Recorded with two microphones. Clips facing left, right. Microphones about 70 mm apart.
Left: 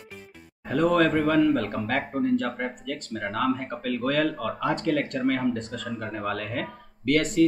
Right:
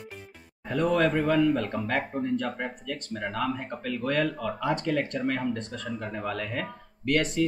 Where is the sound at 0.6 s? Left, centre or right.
Left.